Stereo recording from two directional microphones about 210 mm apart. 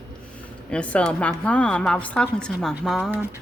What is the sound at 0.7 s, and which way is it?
A woman's voice, 5° left (ahead or behind).